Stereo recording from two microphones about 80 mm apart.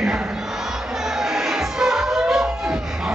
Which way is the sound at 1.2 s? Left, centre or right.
Centre.